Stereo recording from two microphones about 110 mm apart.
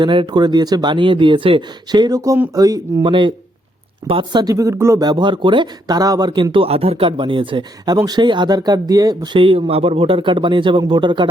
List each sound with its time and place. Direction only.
0.0 s speech: 45° right (ahead or behind)
3.0 s speech: 50° right (ahead or behind); by 5.0 s 25° right (ahead or behind)
5.0 s speech: 45° right (ahead or behind)
8.0 s speech: 40° right (ahead or behind)